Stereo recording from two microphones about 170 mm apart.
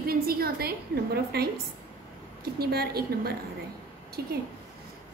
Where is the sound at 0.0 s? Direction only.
60° right (ahead or behind).